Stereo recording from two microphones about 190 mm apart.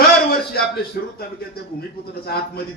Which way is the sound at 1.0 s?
55° left (ahead or behind).